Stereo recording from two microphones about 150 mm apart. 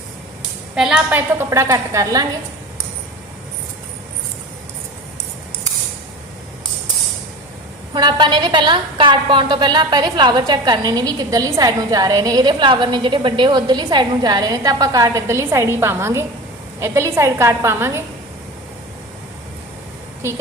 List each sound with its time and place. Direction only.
0.8 s a woman's voice: 5° right (ahead or behind); by 2.2 s 25° right (ahead or behind)
7.9 s a woman's voice: 30° right (ahead or behind)